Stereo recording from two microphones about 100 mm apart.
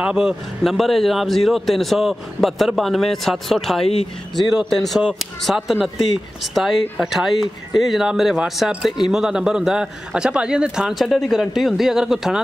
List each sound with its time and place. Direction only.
0.1 s a man's voice: 5° right (ahead or behind)
3.8 s speech: 85° left
4.4 s a man's voice: centre (ahead or behind)